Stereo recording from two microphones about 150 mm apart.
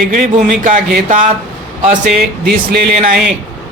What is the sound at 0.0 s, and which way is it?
Speech, 60° right (ahead or behind).